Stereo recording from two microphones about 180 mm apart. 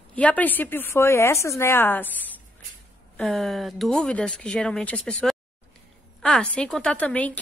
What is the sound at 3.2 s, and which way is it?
A woman's voice, centre (ahead or behind).